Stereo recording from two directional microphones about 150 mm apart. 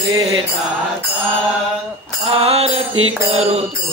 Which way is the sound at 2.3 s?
40° right (ahead or behind).